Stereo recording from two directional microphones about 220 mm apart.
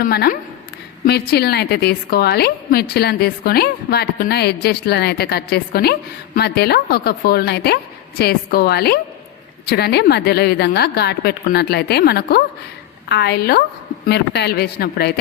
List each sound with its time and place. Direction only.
0.0 s a woman's voice: 45° left (ahead or behind)